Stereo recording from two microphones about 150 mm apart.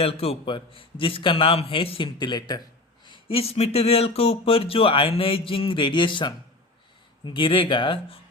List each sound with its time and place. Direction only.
0.0 s speech: 40° left (ahead or behind)